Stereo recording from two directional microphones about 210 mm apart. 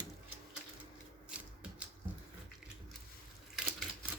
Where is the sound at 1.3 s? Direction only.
5° right (ahead or behind).